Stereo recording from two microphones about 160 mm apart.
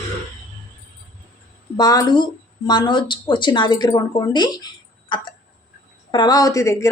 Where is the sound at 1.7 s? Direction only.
25° left (ahead or behind).